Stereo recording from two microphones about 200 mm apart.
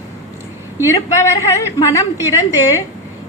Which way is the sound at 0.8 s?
15° left (ahead or behind).